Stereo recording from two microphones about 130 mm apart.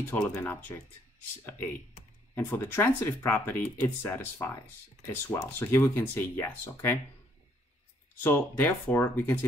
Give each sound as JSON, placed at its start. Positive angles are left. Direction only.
{"t": 0.1, "sound": "speech", "side_deg": 15}
{"t": 2.3, "sound": "speech", "side_deg": 15}
{"t": 8.2, "sound": "speech", "side_deg": 15}